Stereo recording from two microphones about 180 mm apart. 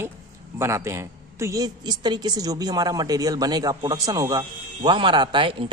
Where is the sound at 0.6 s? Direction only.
15° right (ahead or behind).